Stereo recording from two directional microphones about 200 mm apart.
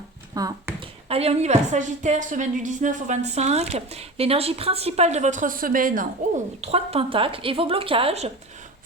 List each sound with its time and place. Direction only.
0.4 s speech: 15° right (ahead or behind)
1.0 s a woman's voice: 30° right (ahead or behind)
6.6 s a woman's voice: 30° right (ahead or behind)